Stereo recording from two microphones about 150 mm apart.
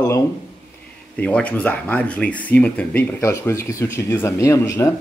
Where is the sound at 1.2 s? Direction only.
10° left (ahead or behind).